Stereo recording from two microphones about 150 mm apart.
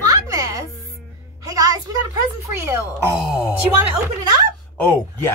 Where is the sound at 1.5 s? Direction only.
20° right (ahead or behind).